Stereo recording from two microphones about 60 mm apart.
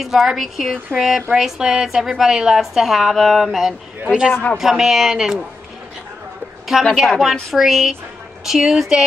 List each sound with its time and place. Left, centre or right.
0.0 s a woman's voice: centre
4.3 s a man's voice: left
4.6 s a woman's voice: centre
6.8 s a woman's voice: centre